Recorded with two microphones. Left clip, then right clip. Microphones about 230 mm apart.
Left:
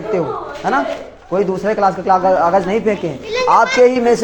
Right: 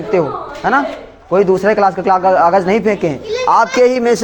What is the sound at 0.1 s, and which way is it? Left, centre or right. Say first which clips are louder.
A man's voice: right 5 dB; right.